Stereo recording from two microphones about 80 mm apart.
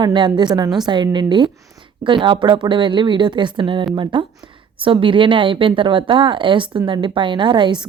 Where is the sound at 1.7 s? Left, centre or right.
Right.